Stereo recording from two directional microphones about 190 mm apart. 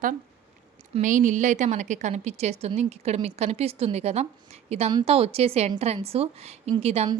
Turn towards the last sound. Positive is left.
turn(degrees=-35)  # may be behind; listen again after turning